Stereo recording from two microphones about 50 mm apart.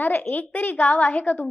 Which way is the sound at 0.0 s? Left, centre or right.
Left.